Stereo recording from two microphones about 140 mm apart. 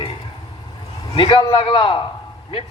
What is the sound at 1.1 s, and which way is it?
Speech, 35° left (ahead or behind).